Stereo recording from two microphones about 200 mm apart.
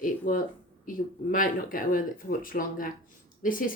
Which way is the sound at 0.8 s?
45° left (ahead or behind).